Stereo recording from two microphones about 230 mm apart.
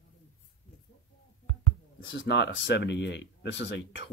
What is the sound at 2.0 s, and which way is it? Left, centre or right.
Speech, left.